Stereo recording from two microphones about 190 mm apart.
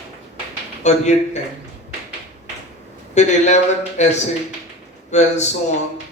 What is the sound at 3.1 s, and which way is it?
Speech, 35° left (ahead or behind).